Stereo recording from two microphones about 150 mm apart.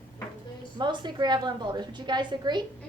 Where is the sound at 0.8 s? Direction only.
30° right (ahead or behind).